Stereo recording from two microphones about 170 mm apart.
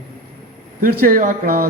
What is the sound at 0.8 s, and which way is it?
Speech, 55° right (ahead or behind).